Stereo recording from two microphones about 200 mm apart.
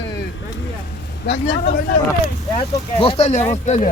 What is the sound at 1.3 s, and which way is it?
Speech, 60° left (ahead or behind).